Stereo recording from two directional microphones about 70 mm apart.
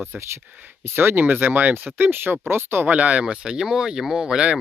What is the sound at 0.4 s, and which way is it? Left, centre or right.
Speech, right.